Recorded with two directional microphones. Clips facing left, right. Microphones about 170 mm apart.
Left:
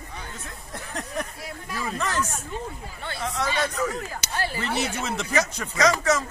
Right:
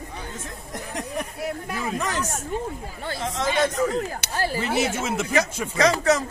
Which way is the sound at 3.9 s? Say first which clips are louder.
Right 6 dB; 60° right (ahead or behind).